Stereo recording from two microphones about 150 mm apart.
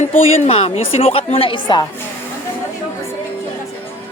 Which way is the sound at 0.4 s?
40° left (ahead or behind).